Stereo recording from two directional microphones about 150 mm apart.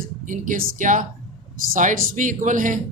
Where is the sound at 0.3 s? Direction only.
60° right (ahead or behind).